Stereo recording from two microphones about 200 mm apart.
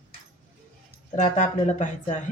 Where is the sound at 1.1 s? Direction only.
40° left (ahead or behind).